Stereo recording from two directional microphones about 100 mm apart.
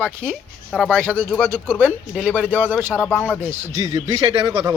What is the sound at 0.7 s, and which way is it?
Speech, 5° left (ahead or behind).